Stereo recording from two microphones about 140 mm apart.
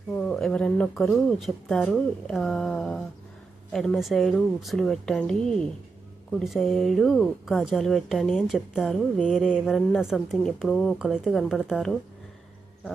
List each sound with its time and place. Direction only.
0.1 s a woman's voice: 10° left (ahead or behind)